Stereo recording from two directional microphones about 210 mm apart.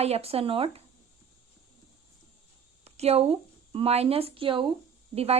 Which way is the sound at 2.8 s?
30° right (ahead or behind).